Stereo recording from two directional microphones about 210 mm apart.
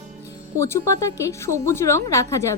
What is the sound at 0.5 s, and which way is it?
A woman's voice, 15° left (ahead or behind).